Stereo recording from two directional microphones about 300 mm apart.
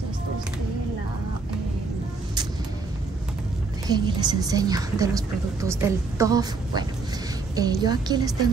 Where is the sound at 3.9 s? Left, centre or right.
Centre.